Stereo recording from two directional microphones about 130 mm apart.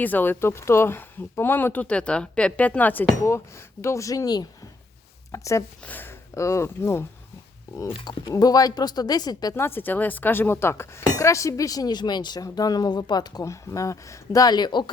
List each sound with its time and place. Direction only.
0.0 s speech: 15° left (ahead or behind)
7.9 s speech: 40° left (ahead or behind)